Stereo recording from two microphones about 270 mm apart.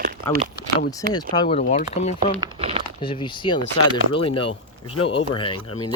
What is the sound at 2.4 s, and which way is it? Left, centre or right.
Crumpling, right.